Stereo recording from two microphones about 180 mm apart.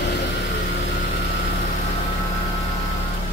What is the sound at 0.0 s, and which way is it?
Vehicle, 70° left (ahead or behind).